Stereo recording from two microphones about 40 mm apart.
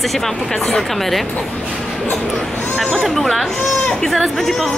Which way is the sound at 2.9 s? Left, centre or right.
Centre.